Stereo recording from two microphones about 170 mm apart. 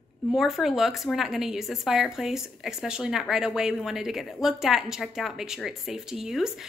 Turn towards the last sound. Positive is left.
turn(degrees=0)  # may be behind; listen again after turning